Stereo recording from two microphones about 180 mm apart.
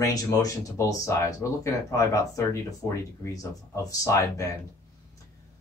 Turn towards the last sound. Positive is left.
turn(degrees=15)  # may be behind; listen again after turning